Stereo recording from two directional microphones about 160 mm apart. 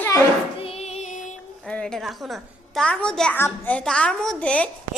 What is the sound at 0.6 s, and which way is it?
Music, 40° left (ahead or behind).